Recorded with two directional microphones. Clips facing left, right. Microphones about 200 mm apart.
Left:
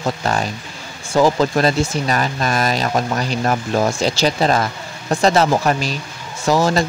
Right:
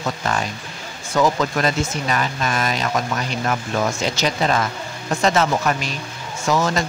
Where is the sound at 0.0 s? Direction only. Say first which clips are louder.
Left 3 dB; 35° left (ahead or behind).